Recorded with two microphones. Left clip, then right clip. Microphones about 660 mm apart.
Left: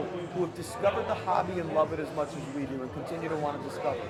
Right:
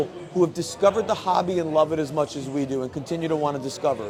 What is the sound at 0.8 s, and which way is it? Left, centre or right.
A man's voice, right.